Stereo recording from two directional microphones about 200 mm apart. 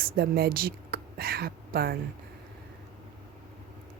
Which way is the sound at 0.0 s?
50° right (ahead or behind).